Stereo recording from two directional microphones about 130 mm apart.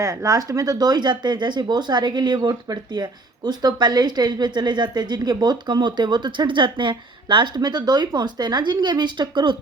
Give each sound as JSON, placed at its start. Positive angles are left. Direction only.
{"t": 0.0, "sound": "speech", "side_deg": -25}